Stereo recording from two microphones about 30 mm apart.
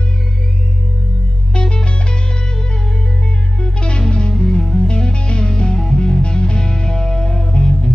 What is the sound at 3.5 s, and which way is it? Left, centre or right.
Music, left.